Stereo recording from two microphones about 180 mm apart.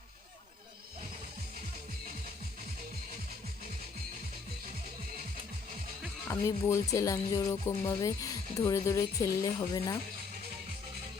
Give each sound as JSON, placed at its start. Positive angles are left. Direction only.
{"t": 6.2, "sound": "speech", "side_deg": 15}